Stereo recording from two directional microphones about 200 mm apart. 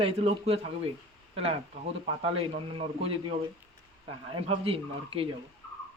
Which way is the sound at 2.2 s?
30° right (ahead or behind).